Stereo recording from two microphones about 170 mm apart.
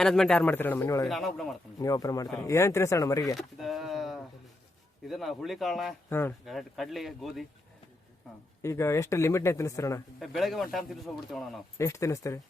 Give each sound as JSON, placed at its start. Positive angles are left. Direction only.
{"t": 0.0, "sound": "speech", "side_deg": 5}
{"t": 1.0, "sound": "speech", "side_deg": 0}
{"t": 1.8, "sound": "speech", "side_deg": 20}
{"t": 3.3, "sound": "speech", "side_deg": 0}
{"t": 6.1, "sound": "speech", "side_deg": 15}
{"t": 6.4, "sound": "speech", "side_deg": 0}
{"t": 8.6, "sound": "speech", "side_deg": 15}
{"t": 10.2, "sound": "speech", "side_deg": 0}
{"t": 11.8, "sound": "speech", "side_deg": 20}